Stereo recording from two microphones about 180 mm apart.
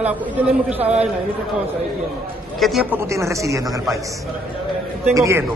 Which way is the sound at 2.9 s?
15° right (ahead or behind).